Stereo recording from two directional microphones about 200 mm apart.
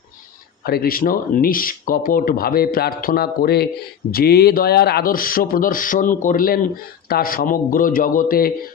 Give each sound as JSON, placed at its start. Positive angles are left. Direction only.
{"t": 0.6, "sound": "speech", "side_deg": 50}